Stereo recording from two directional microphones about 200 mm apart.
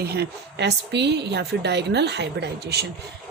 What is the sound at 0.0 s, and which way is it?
A woman's voice, 55° right (ahead or behind).